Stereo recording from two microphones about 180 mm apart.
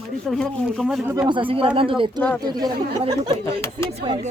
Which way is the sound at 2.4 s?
20° right (ahead or behind).